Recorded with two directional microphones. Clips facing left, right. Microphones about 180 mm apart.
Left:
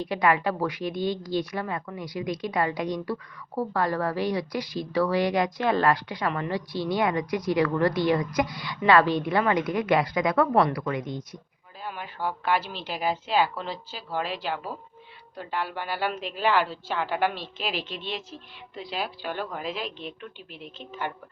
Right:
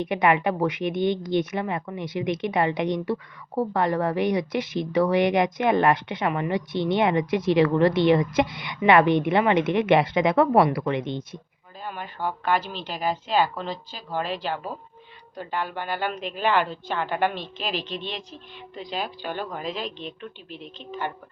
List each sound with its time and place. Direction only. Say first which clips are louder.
0.0 s a woman's voice: right 2 dB; 20° right (ahead or behind)
10.5 s a woman's voice: right 3 dB; 5° right (ahead or behind)
10.8 s a woman's voice: right 4 dB; 25° right (ahead or behind)
11.8 s a woman's voice: right 1 dB; 5° left (ahead or behind)